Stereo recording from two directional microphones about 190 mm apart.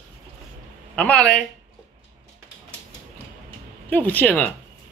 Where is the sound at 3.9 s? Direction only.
10° left (ahead or behind).